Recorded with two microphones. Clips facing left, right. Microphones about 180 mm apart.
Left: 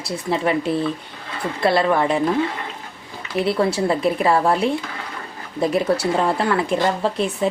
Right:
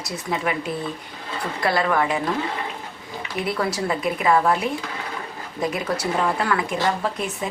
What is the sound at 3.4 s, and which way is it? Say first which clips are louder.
Speech: left 6 dB; 30° left (ahead or behind).